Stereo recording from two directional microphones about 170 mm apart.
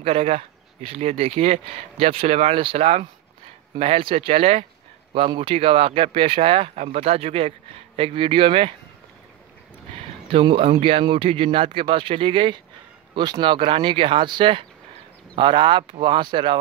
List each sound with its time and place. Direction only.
0.0 s speech: 35° right (ahead or behind)
9.9 s speech: 30° right (ahead or behind)